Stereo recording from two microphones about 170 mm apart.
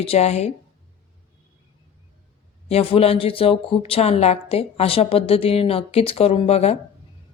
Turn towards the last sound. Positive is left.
turn(degrees=35)  # may be behind; listen again after turning